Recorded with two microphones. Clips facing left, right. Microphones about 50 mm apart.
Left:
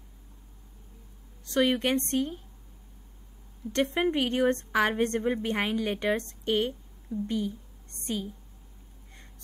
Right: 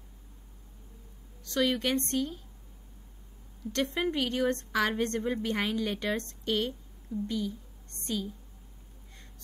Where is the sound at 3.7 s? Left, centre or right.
Left.